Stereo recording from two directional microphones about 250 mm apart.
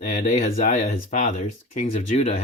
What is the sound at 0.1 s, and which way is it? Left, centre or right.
Speech, left.